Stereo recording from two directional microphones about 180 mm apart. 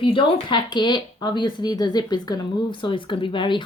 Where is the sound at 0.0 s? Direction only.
30° left (ahead or behind).